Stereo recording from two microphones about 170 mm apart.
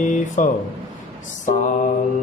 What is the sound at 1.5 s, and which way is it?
Mantra, 50° left (ahead or behind).